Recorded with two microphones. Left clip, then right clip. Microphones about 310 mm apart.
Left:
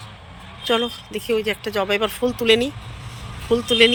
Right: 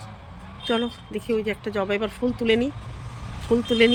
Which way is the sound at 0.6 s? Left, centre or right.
Centre.